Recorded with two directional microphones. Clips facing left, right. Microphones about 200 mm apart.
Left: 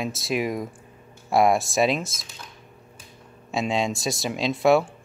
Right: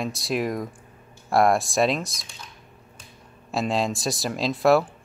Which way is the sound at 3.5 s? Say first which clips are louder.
Even; centre (ahead or behind).